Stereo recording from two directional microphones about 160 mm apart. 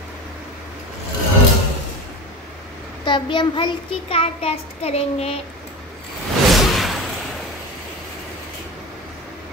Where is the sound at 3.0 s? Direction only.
30° left (ahead or behind).